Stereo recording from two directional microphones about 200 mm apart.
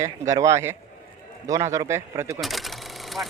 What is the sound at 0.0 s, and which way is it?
Speech, 15° right (ahead or behind).